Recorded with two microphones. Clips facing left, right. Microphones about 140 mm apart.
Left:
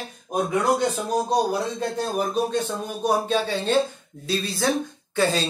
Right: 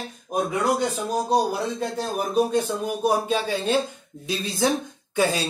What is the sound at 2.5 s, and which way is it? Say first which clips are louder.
Speech: right 3 dB; 10° right (ahead or behind).